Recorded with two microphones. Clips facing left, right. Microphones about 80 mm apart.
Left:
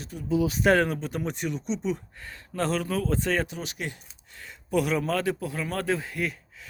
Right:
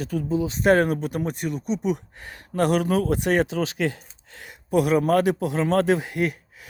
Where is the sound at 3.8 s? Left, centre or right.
Right.